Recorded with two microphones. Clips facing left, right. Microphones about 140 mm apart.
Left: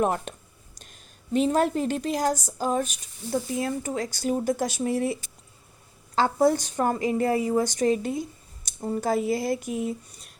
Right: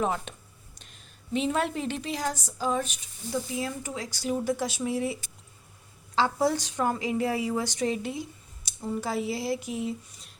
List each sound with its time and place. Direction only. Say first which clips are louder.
0.0 s a woman's voice: left 4 dB; 50° left (ahead or behind)
6.1 s a woman's voice: left 4 dB; 50° left (ahead or behind)